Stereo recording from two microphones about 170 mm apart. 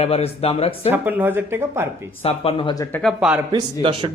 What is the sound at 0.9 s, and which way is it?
Speech, 10° right (ahead or behind).